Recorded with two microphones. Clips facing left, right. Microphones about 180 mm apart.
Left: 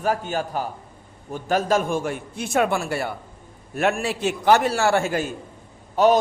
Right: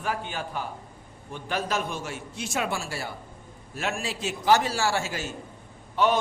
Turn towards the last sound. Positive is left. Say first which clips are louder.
# left 7 dB
turn(degrees=40)  # may be behind; listen again after turning